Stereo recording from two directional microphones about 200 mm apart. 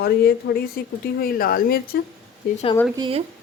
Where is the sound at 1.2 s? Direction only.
45° left (ahead or behind).